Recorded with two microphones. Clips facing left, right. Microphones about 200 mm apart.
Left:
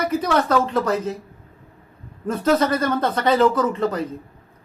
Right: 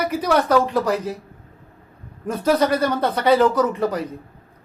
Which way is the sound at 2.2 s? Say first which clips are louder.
Even; 10° right (ahead or behind).